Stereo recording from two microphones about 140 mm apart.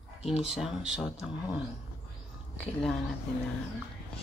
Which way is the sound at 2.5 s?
5° left (ahead or behind).